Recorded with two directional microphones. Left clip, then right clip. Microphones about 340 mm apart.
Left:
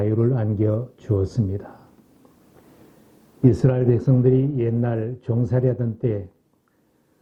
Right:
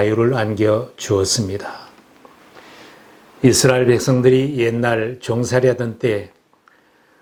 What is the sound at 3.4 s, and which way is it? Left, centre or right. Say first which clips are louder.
Speech: right 7 dB; centre.